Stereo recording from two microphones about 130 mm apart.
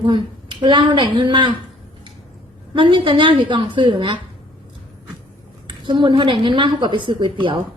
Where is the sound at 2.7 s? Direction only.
40° right (ahead or behind).